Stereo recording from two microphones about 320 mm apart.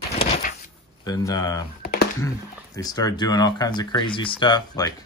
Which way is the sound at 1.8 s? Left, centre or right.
Left.